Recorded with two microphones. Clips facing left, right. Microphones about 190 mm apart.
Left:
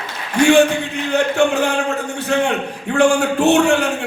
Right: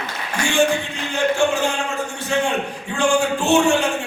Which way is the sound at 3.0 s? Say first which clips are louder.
Left 4 dB; 65° left (ahead or behind).